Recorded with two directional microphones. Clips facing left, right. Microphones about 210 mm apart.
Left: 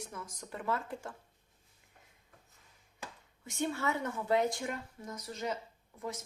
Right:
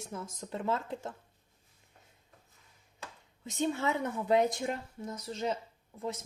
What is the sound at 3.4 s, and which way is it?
Speech, 20° right (ahead or behind).